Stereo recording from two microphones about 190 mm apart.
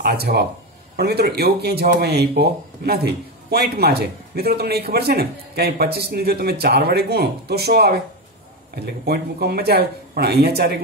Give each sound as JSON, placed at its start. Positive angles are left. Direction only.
{"t": 0.0, "sound": "speech", "side_deg": -55}
{"t": 9.0, "sound": "speech", "side_deg": -55}